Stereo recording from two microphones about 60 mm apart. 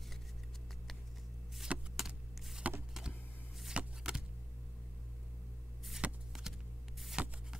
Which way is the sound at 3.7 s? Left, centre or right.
Centre.